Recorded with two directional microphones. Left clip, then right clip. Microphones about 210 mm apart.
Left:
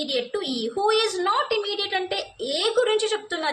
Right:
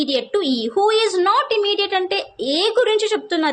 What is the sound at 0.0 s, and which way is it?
A woman's voice, 45° right (ahead or behind).